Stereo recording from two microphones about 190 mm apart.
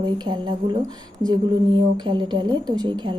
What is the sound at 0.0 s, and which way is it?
A woman's voice, 25° right (ahead or behind).